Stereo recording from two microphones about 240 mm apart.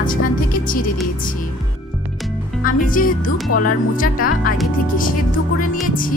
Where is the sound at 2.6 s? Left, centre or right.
Left.